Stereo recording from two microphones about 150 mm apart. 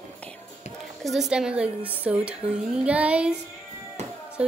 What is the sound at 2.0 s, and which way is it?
Child singing, 10° right (ahead or behind).